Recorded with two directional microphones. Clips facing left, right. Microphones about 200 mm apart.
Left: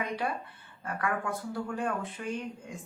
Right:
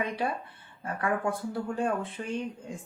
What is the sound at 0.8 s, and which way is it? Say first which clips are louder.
Speech: right 3 dB; 30° right (ahead or behind).